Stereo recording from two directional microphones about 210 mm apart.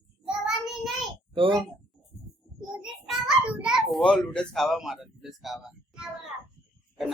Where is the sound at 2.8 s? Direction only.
Centre (ahead or behind).